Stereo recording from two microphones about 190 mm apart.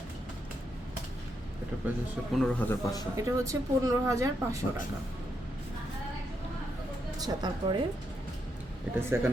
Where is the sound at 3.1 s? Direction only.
15° right (ahead or behind).